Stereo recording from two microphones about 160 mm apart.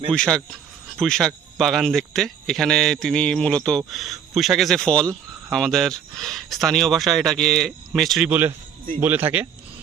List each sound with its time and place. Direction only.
0.1 s speech: 5° left (ahead or behind)
8.3 s speech: 15° right (ahead or behind)